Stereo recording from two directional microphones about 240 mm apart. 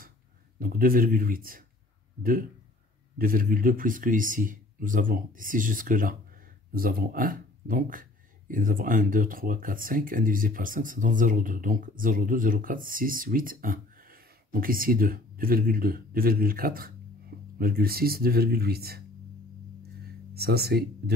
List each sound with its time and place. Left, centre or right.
0.6 s speech: right
3.2 s speech: right
20.3 s speech: right